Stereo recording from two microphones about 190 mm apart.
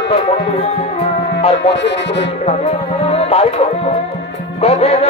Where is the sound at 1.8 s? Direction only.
65° left (ahead or behind).